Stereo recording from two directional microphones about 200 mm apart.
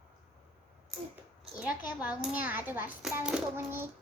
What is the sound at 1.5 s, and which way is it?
A child's voice, 5° right (ahead or behind).